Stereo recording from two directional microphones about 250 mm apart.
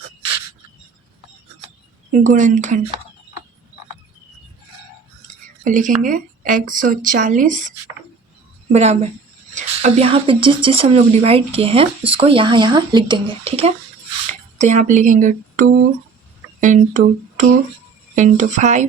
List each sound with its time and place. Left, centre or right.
2.1 s speech: right
5.6 s speech: right
8.7 s speech: right